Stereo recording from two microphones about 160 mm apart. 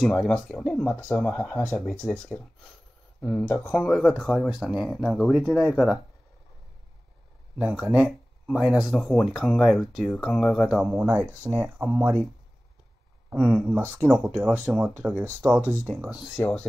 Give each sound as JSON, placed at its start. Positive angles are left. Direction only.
{"t": 0.0, "sound": "speech", "side_deg": 5}
{"t": 7.5, "sound": "speech", "side_deg": -5}
{"t": 13.3, "sound": "speech", "side_deg": -5}
{"t": 16.2, "sound": "speech", "side_deg": 5}